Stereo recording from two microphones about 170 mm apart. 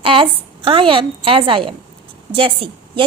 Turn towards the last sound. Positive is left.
turn(degrees=-30)  # may be behind; listen again after turning